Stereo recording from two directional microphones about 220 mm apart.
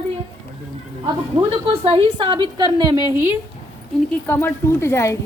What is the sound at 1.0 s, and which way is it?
A woman's voice, 20° right (ahead or behind).